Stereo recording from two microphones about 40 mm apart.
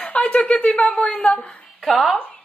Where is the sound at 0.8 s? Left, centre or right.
Left.